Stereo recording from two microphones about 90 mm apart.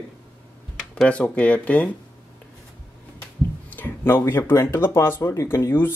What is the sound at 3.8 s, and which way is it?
Speech, 25° left (ahead or behind).